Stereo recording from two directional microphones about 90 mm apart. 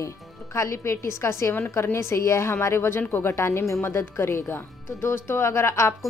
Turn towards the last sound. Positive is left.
turn(degrees=30)  # may be behind; listen again after turning